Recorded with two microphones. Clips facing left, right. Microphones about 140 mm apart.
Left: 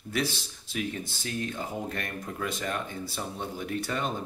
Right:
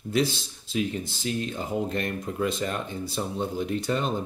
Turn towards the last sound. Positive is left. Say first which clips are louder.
# right 4 dB
turn(degrees=-25)  # may be behind; listen again after turning